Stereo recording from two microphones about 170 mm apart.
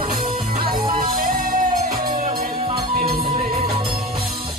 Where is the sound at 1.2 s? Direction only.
55° right (ahead or behind).